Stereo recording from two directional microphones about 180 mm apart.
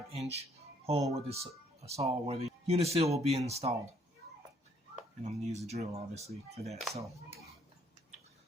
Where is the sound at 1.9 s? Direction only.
35° right (ahead or behind).